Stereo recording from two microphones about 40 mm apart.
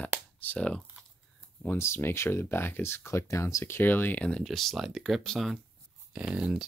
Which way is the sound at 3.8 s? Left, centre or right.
Left.